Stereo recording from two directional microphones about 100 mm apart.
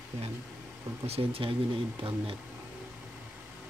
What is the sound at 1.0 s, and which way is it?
Speech, 80° right.